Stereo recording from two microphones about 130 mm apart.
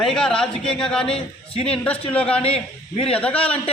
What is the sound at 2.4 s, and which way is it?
Speech, 50° left (ahead or behind).